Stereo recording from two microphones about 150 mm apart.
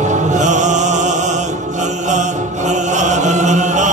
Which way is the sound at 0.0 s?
55° right (ahead or behind).